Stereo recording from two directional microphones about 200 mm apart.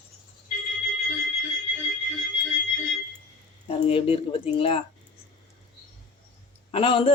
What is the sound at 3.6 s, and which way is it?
Speech, 25° left (ahead or behind).